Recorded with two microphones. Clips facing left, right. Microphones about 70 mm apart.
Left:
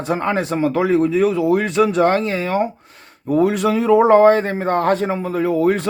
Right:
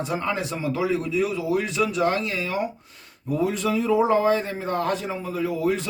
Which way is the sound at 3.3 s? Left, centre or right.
Left.